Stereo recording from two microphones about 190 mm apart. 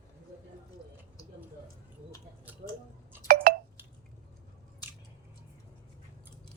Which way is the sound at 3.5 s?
50° right (ahead or behind).